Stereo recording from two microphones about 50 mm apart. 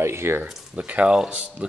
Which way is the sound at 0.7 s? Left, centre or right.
Right.